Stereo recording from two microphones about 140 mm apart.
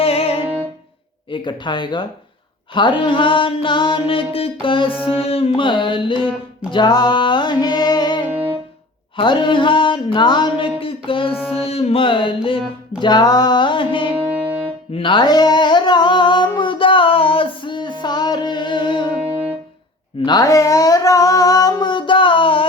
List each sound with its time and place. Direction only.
0.0 s music: 45° left (ahead or behind)
8.3 s music: 10° right (ahead or behind)
9.1 s music: 35° left (ahead or behind)
14.1 s music: 10° right (ahead or behind)
14.9 s humming: 35° left (ahead or behind)
20.2 s humming: 30° left (ahead or behind)